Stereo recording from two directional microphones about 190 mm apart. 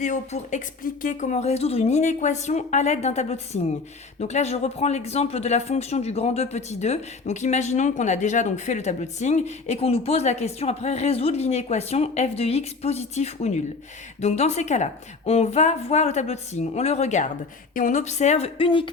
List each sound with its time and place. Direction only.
0.0 s speech: 40° left (ahead or behind)